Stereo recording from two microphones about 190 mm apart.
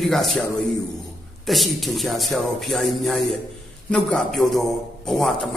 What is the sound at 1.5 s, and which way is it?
A man's voice, centre (ahead or behind).